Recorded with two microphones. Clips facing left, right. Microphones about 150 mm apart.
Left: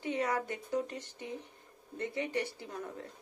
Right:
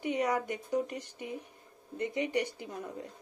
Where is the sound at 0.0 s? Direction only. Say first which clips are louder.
Right 3 dB; 15° right (ahead or behind).